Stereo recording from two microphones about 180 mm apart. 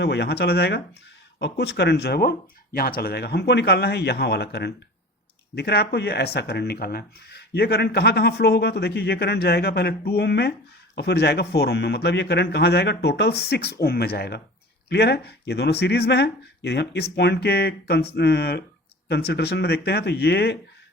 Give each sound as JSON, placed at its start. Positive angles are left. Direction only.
{"t": 0.0, "sound": "speech", "side_deg": 70}